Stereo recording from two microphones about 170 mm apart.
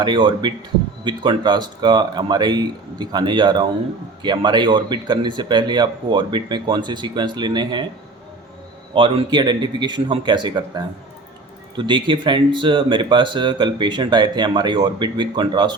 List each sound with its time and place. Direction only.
0.0 s speech: 25° right (ahead or behind)
9.0 s speech: 30° right (ahead or behind)